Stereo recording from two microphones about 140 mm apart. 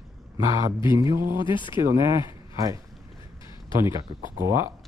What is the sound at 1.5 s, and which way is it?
Speech, 35° left (ahead or behind).